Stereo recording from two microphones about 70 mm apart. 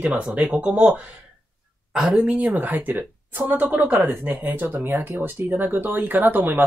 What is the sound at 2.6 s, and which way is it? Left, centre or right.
Speech, right.